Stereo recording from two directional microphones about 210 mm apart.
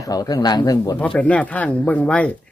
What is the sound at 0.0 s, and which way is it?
Speech, 15° left (ahead or behind).